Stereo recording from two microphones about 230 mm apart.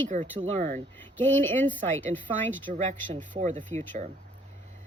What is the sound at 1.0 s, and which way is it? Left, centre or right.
Speech, centre.